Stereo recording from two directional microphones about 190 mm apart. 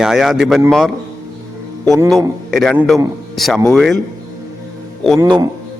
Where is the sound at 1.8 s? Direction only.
15° right (ahead or behind).